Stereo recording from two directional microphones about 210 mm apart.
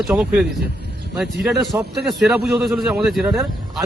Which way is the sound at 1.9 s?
Centre (ahead or behind).